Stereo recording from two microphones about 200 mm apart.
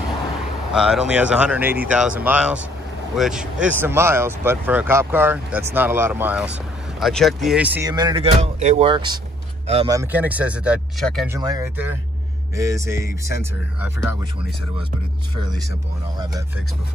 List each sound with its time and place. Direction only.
0.7 s speech: 5° right (ahead or behind)
7.9 s speech: 20° right (ahead or behind)
9.8 s speech: 10° right (ahead or behind)
11.2 s speech: 15° right (ahead or behind)